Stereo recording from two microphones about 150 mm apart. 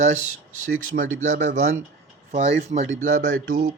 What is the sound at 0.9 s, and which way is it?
Speech, 55° right (ahead or behind).